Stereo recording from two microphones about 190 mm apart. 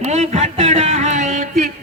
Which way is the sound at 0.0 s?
35° right (ahead or behind).